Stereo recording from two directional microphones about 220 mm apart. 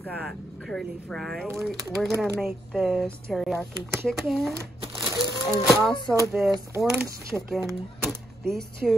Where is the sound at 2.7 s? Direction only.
Centre (ahead or behind).